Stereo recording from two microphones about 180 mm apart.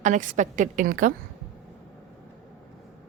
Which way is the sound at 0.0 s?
45° right (ahead or behind).